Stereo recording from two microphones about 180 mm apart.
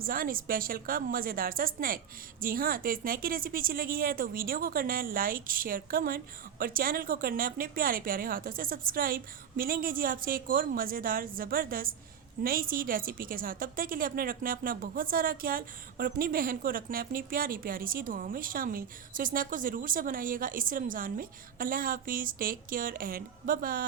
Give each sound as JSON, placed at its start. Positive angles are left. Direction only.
{"t": 0.0, "sound": "a woman's voice", "side_deg": -55}